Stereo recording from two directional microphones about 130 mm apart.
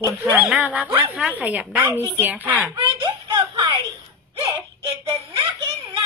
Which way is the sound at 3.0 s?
35° right (ahead or behind).